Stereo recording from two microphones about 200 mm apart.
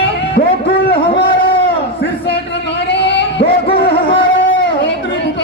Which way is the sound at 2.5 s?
60° left (ahead or behind).